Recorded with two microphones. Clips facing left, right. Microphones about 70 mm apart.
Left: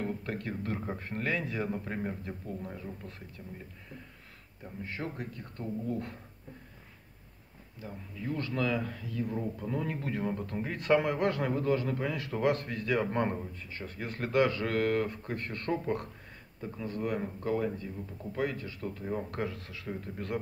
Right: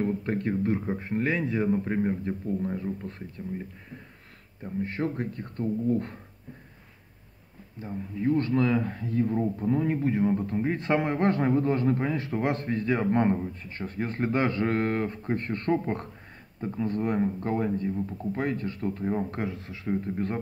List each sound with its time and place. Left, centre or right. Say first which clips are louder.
0.0 s speech: right 8 dB; right
4.8 s speech: right 7 dB; right
7.8 s speech: right 11 dB; right
16.8 s speech: right 7 dB; right
19.3 s speech: right 3 dB; right